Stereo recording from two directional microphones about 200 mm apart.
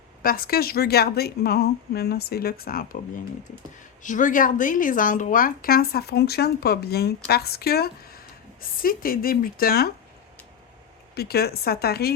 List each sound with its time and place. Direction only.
0.2 s a woman's voice: 50° left (ahead or behind)
4.0 s a woman's voice: 40° left (ahead or behind)
11.1 s a woman's voice: 50° left (ahead or behind)